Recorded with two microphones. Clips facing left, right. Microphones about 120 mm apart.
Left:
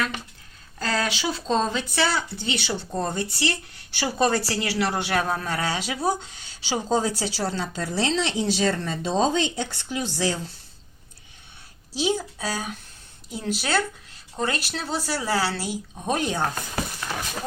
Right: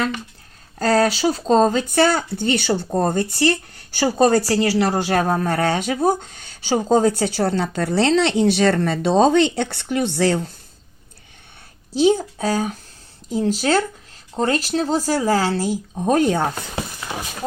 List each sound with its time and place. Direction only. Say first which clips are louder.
0.8 s speech: right 9 dB; 40° right (ahead or behind); by 10.5 s 60° right (ahead or behind)
11.9 s speech: right 9 dB; 50° right (ahead or behind)
16.6 s a sound: right 1 dB; 20° right (ahead or behind)